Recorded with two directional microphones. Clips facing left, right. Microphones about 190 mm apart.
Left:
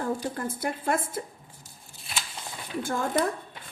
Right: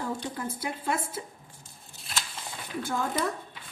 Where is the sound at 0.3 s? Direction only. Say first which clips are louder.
Left 3 dB; 50° left (ahead or behind).